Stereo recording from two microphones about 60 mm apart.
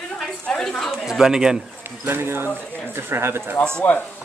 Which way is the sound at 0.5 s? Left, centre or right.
Centre.